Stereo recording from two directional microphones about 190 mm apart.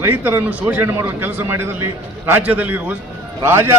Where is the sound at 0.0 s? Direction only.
10° right (ahead or behind).